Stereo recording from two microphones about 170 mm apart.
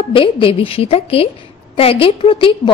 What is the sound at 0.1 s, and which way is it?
A woman's voice, 30° left (ahead or behind).